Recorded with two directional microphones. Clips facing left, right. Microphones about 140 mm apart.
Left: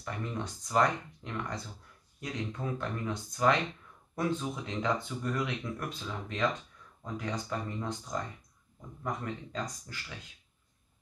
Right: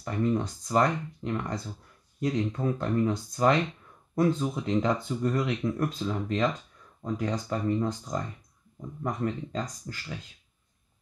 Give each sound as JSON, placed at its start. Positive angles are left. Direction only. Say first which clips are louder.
{"t": 0.0, "sound": "speech", "louder": "right 10 dB", "side_deg": -35}